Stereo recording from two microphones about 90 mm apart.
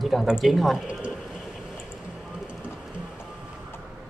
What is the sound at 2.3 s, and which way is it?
Music, 10° right (ahead or behind).